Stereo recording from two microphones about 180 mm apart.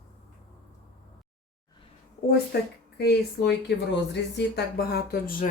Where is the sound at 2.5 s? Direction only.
60° left (ahead or behind).